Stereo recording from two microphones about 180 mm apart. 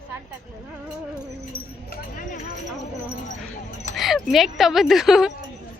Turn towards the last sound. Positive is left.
turn(degrees=0)  # may be behind; listen again after turning